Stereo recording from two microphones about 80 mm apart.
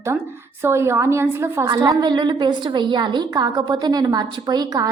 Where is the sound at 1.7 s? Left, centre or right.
Right.